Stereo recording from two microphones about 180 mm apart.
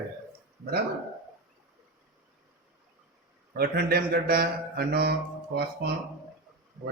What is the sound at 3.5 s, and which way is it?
A man's voice, 60° right (ahead or behind).